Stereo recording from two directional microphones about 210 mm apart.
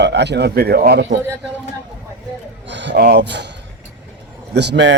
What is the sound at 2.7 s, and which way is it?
Speech, 55° right (ahead or behind).